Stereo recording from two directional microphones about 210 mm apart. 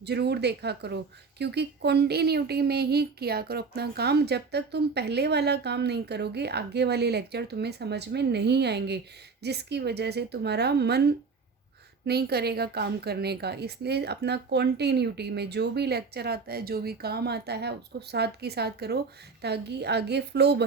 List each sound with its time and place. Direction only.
0.0 s a woman's voice: 50° right (ahead or behind)
12.0 s a woman's voice: 50° right (ahead or behind)